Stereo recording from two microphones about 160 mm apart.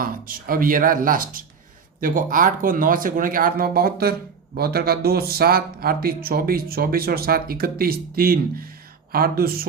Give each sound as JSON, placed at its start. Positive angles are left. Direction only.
{"t": 0.0, "sound": "speech", "side_deg": -60}